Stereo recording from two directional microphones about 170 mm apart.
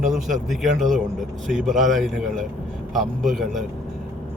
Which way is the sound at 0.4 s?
Centre (ahead or behind).